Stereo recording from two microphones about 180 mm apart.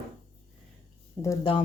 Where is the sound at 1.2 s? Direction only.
15° left (ahead or behind).